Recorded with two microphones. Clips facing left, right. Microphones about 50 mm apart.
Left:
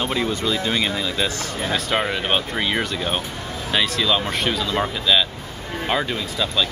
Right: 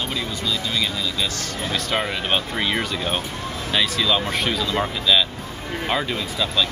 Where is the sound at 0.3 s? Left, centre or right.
Left.